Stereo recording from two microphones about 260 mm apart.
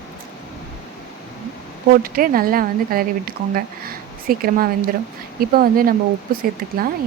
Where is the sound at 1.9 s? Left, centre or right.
Right.